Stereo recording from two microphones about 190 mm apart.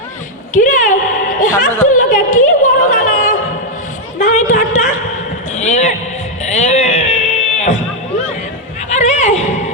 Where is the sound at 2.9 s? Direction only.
45° left (ahead or behind).